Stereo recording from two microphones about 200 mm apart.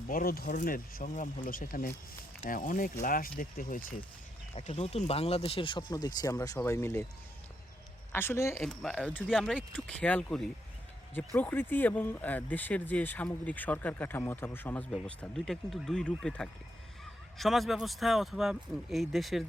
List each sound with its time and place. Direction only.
0.1 s speech: 45° left (ahead or behind)
4.5 s speech: 30° left (ahead or behind); by 7.0 s 10° left (ahead or behind)
8.1 s speech: 10° left (ahead or behind)
8.6 s speech: centre (ahead or behind)